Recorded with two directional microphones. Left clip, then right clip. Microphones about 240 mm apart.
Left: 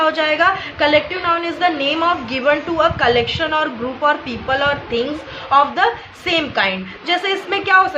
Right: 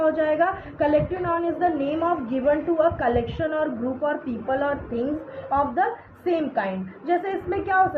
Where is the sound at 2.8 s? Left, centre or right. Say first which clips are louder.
Left 6 dB; left.